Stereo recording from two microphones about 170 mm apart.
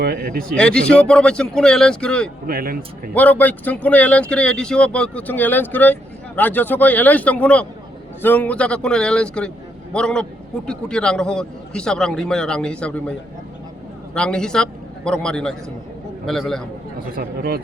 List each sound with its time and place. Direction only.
0.0 s speech: 65° right (ahead or behind)
0.5 s a man's voice: 5° left (ahead or behind)
2.5 s speech: 60° right (ahead or behind)
3.2 s a man's voice: 10° left (ahead or behind)